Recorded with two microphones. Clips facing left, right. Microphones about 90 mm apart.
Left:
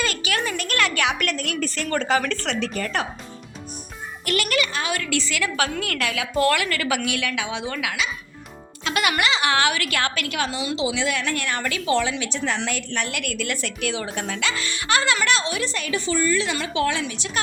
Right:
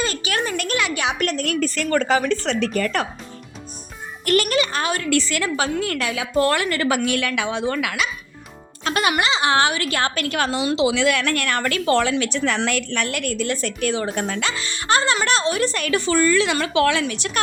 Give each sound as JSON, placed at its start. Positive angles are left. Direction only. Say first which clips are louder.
{"t": 0.0, "sound": "a sound", "louder": "right 2 dB", "side_deg": -30}
{"t": 0.8, "sound": "speech", "louder": "left 2 dB", "side_deg": -20}
{"t": 2.2, "sound": "a woman's voice", "louder": "right 5 dB", "side_deg": -20}
{"t": 2.6, "sound": "speech", "louder": "right 4 dB", "side_deg": -55}
{"t": 4.4, "sound": "a woman's voice", "louder": "right 3 dB", "side_deg": -30}
{"t": 4.7, "sound": "speech", "louder": "right 3 dB", "side_deg": -40}
{"t": 5.1, "sound": "speech", "louder": "right 5 dB", "side_deg": -50}
{"t": 5.4, "sound": "a woman's voice", "louder": "right 2 dB", "side_deg": -30}
{"t": 8.8, "sound": "a woman's voice", "louder": "right 2 dB", "side_deg": -35}
{"t": 13.1, "sound": "a woman's voice", "louder": "right 4 dB", "side_deg": -40}
{"t": 14.5, "sound": "a woman's voice", "louder": "right 2 dB", "side_deg": -25}